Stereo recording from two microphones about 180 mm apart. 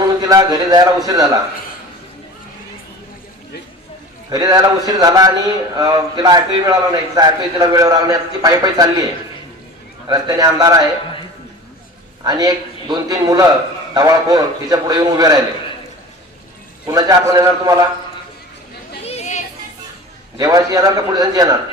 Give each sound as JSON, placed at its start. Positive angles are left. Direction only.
{"t": 0.2, "sound": "a man's voice", "side_deg": -20}
{"t": 4.3, "sound": "a man's voice", "side_deg": -20}
{"t": 10.1, "sound": "a man's voice", "side_deg": -20}
{"t": 12.2, "sound": "a man's voice", "side_deg": -20}
{"t": 16.8, "sound": "a man's voice", "side_deg": -20}
{"t": 19.0, "sound": "chatter", "side_deg": 40}
{"t": 20.4, "sound": "a man's voice", "side_deg": -20}